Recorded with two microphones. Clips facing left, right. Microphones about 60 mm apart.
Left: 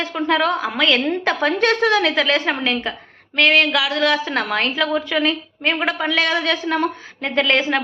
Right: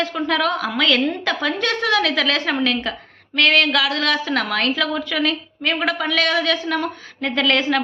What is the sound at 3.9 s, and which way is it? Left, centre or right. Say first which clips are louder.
A woman's voice: left 2 dB; centre.